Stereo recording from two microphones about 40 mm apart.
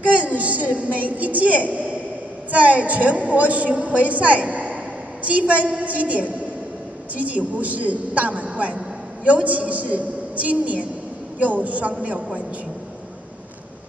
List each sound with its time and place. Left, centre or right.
0.0 s a woman's voice: right